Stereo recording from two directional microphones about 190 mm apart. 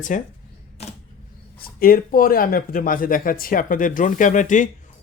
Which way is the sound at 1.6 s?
50° left (ahead or behind).